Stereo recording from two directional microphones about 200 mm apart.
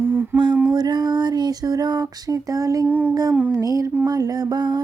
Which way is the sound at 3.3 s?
5° right (ahead or behind).